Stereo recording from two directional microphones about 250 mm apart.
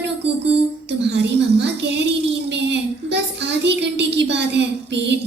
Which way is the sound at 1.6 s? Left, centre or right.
Right.